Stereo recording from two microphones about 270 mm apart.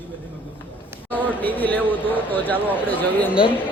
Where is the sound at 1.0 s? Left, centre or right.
Centre.